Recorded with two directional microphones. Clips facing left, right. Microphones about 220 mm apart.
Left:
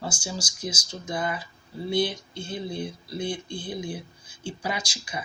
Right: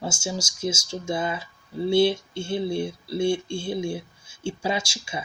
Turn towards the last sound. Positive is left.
turn(degrees=-25)  # may be behind; listen again after turning